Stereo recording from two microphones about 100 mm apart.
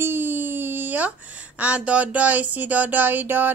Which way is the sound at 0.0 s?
20° right (ahead or behind).